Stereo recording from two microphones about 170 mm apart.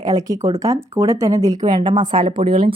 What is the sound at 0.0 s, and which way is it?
Speech, 20° right (ahead or behind).